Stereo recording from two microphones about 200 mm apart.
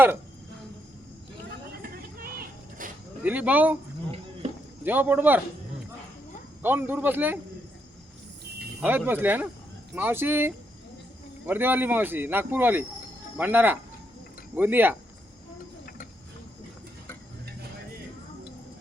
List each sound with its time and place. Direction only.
1.8 s a sound: 45° right (ahead or behind)
3.2 s speech: 10° right (ahead or behind)
4.4 s a sound: 30° right (ahead or behind)
4.8 s speech: 10° right (ahead or behind)
6.6 s speech: 10° right (ahead or behind)
8.8 s speech: 10° right (ahead or behind)